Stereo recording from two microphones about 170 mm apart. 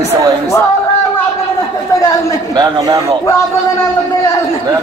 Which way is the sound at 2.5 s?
25° right (ahead or behind).